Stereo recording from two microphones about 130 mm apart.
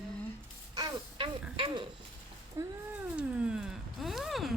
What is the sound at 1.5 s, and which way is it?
Speech, 40° right (ahead or behind).